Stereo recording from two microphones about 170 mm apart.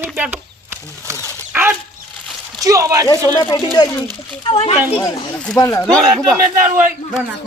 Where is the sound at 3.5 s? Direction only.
30° left (ahead or behind).